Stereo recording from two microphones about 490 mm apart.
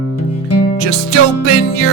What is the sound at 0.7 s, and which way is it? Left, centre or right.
Music, right.